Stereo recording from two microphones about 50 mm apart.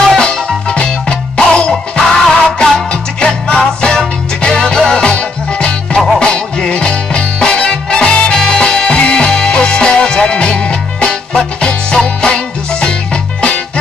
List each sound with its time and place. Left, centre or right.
0.2 s music: centre